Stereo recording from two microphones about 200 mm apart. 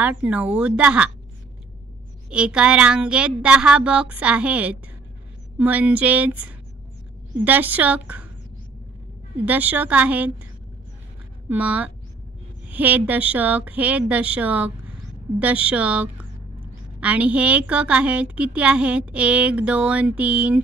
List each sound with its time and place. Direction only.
0.0 s a woman's voice: 5° right (ahead or behind)
2.2 s a woman's voice: 5° right (ahead or behind)
9.4 s a woman's voice: 10° right (ahead or behind)
11.4 s a woman's voice: 5° right (ahead or behind)